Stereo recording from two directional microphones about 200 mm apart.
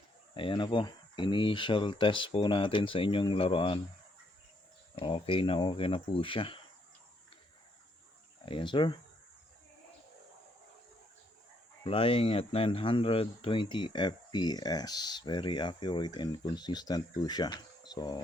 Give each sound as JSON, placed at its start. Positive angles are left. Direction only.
{"t": 0.3, "sound": "speech", "side_deg": 25}
{"t": 4.9, "sound": "speech", "side_deg": 25}
{"t": 8.4, "sound": "speech", "side_deg": 25}
{"t": 11.8, "sound": "speech", "side_deg": 25}